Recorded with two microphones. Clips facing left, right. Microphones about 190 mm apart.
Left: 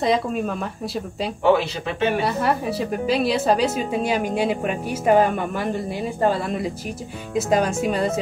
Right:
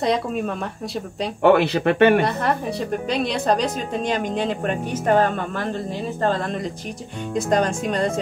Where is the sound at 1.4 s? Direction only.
60° right (ahead or behind).